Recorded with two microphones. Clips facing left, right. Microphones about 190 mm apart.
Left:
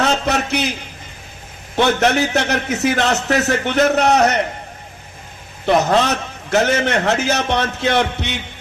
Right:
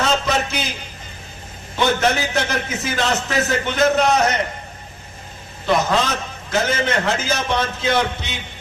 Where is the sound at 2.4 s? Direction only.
65° left (ahead or behind).